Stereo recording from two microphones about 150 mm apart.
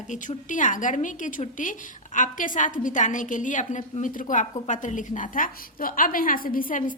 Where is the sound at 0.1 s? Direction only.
60° left (ahead or behind).